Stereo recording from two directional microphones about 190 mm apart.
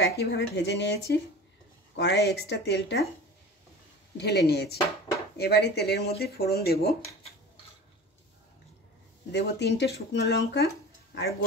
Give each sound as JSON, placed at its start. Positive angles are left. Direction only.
{"t": 0.0, "sound": "speech", "side_deg": 65}
{"t": 4.2, "sound": "speech", "side_deg": 60}
{"t": 9.3, "sound": "speech", "side_deg": 60}